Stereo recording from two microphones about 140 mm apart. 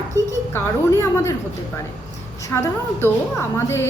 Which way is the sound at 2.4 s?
20° left (ahead or behind).